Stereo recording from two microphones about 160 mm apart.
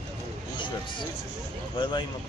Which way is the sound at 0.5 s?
30° left (ahead or behind).